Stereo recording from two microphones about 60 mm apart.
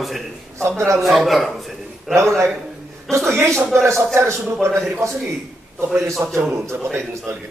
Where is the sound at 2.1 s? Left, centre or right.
Right.